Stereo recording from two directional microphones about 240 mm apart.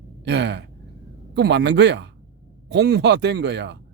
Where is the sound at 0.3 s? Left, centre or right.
Right.